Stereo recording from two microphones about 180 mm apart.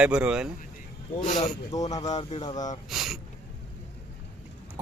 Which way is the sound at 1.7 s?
20° left (ahead or behind).